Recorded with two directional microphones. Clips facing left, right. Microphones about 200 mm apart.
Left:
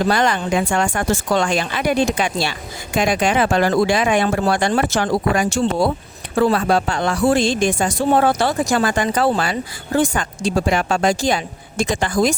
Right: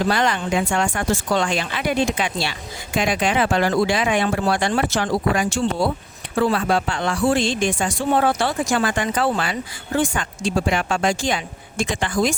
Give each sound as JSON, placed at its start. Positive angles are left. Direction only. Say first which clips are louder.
{"t": 0.1, "sound": "speech", "louder": "left 3 dB", "side_deg": 45}